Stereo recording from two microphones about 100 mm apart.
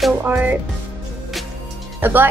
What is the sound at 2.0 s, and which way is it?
Speech, 20° right (ahead or behind).